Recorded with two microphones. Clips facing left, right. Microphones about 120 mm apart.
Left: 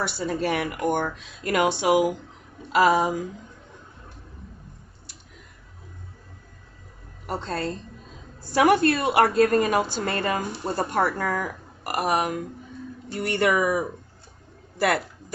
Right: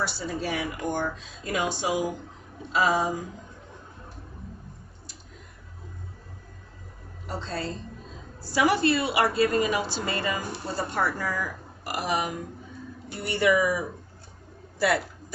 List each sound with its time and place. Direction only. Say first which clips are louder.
0.0 s speech: left 4 dB; 60° left (ahead or behind)
7.3 s a woman's voice: left 4 dB; 55° left (ahead or behind)